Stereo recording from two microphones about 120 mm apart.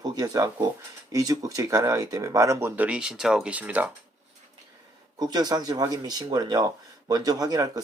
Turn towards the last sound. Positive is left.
turn(degrees=-30)  # may be behind; listen again after turning